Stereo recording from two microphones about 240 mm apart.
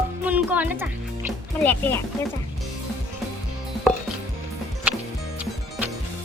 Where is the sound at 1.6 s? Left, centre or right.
Centre.